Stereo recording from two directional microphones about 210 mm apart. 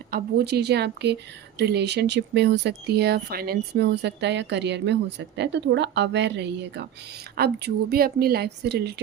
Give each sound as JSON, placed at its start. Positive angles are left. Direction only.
{"t": 0.1, "sound": "speech", "side_deg": -50}